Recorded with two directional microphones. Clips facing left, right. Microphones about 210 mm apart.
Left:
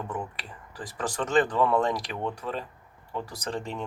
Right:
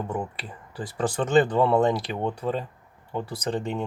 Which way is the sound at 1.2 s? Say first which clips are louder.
Right 3 dB; 25° right (ahead or behind).